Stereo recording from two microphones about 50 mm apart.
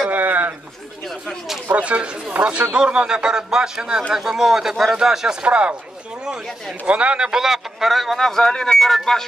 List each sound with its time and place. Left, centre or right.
0.1 s a sound: right
1.8 s speech: right
5.4 s speech: right
6.9 s speech: right; by 8.2 s centre
8.2 s speech: centre